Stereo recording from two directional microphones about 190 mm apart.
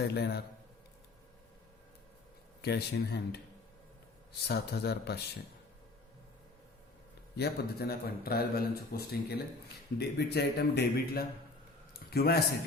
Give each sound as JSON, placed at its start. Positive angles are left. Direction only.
{"t": 0.1, "sound": "speech", "side_deg": 60}
{"t": 2.6, "sound": "speech", "side_deg": 55}
{"t": 7.3, "sound": "speech", "side_deg": 55}